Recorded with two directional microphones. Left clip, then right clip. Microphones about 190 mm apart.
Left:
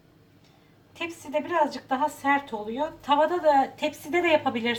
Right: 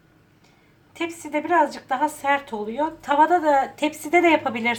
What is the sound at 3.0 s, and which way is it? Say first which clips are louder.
A woman's voice: right 4 dB; 45° right (ahead or behind).